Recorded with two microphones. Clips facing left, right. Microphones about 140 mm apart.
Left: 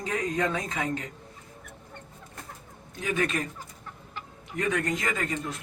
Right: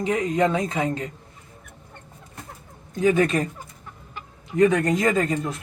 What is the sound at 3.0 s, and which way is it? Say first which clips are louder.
Speech: right 9 dB; 35° right (ahead or behind).